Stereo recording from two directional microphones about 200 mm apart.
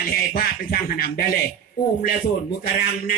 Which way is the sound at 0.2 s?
45° left (ahead or behind).